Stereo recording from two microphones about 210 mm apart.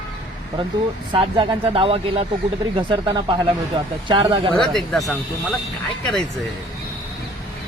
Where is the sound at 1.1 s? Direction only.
25° right (ahead or behind).